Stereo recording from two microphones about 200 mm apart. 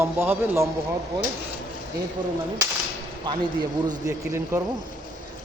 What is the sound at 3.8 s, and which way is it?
Speech, 20° right (ahead or behind).